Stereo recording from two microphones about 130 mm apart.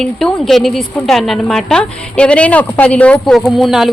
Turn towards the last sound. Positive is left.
turn(degrees=0)  # may be behind; listen again after turning